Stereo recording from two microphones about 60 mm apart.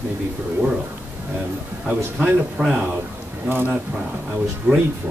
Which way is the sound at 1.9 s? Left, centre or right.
Right.